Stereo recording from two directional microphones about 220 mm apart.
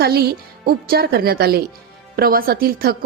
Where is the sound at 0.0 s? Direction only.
45° right (ahead or behind).